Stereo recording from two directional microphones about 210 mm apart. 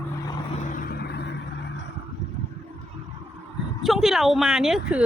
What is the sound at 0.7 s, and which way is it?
Vehicle, 40° left (ahead or behind).